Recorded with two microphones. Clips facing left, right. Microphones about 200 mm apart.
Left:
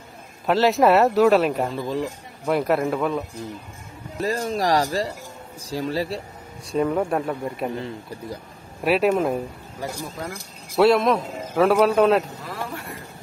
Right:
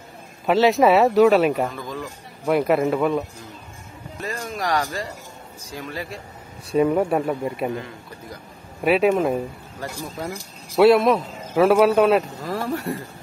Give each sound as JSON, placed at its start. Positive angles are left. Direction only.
{"t": 0.5, "sound": "a man's voice", "side_deg": 0}
{"t": 1.7, "sound": "speech", "side_deg": 30}
{"t": 2.4, "sound": "a man's voice", "side_deg": 0}
{"t": 4.2, "sound": "speech", "side_deg": 35}
{"t": 6.7, "sound": "speech", "side_deg": -10}
{"t": 7.7, "sound": "speech", "side_deg": 35}
{"t": 8.8, "sound": "a man's voice", "side_deg": 0}
{"t": 10.8, "sound": "a man's voice", "side_deg": 0}
{"t": 12.4, "sound": "speech", "side_deg": -40}